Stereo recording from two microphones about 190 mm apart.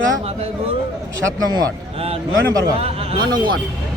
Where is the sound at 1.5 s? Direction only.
20° right (ahead or behind).